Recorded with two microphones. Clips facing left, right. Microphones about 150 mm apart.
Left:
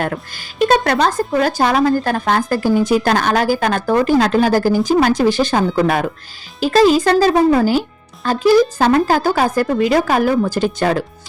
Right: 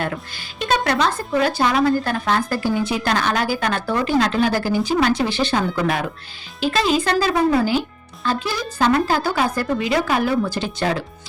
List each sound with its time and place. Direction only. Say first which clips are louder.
0.0 s speech: left 4 dB; 45° left (ahead or behind)